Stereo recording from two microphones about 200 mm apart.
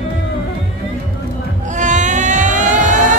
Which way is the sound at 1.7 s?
40° right (ahead or behind).